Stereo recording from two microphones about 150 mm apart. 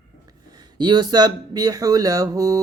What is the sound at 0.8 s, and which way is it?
Speech, 30° right (ahead or behind).